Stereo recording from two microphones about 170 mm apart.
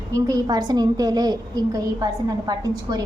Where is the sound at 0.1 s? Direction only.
20° right (ahead or behind).